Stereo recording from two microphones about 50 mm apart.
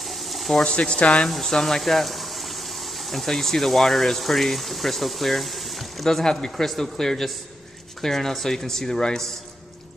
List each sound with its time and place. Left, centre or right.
0.0 s a sound: centre
0.7 s speech: left
1.3 s speech: centre